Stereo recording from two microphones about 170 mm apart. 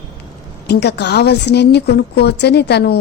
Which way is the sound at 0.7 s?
80° left.